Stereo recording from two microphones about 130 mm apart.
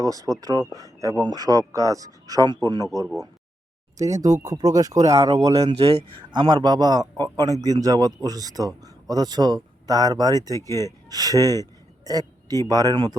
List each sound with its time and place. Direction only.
0.0 s speech: 25° right (ahead or behind)
4.0 s speech: 25° right (ahead or behind)
5.5 s speech: 50° right (ahead or behind)
6.3 s speech: 35° right (ahead or behind)